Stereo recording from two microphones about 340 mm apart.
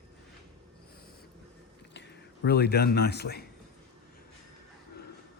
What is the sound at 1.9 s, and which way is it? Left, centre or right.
Speech, left.